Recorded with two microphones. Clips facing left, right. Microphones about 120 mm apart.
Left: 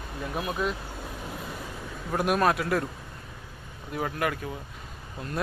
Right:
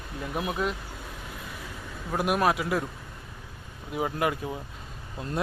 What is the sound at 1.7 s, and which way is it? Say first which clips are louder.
A man's voice: even; centre (ahead or behind).